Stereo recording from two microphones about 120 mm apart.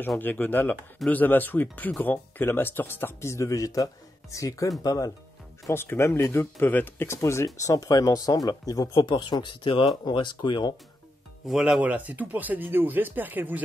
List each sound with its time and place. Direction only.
0.2 s speech: 15° left (ahead or behind); by 10.7 s 40° left (ahead or behind)
11.4 s speech: 5° right (ahead or behind)